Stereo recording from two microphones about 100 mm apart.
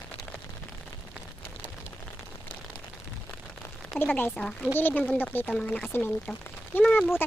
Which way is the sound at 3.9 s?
20° left (ahead or behind).